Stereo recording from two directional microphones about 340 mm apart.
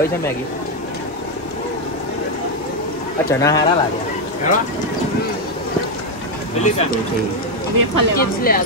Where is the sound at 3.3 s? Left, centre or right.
Centre.